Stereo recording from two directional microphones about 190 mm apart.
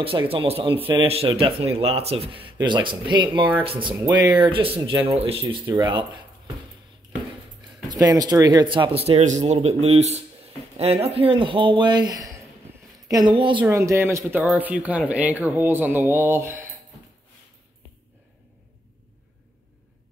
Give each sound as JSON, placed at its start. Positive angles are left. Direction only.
{"t": 0.0, "sound": "speech", "side_deg": -30}
{"t": 7.9, "sound": "speech", "side_deg": -20}
{"t": 13.7, "sound": "speech", "side_deg": -15}